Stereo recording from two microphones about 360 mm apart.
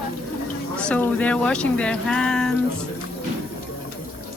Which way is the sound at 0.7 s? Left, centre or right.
Centre.